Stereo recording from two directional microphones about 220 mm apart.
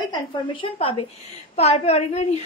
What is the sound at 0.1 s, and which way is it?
A woman's voice, 20° left (ahead or behind).